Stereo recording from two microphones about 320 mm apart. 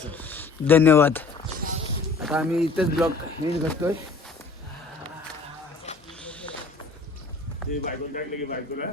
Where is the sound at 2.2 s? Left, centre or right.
Centre.